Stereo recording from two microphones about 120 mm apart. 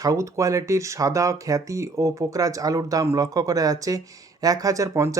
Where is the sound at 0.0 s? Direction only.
25° right (ahead or behind).